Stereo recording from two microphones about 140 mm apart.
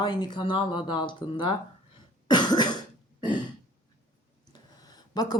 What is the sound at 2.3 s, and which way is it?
Cough, 30° left (ahead or behind).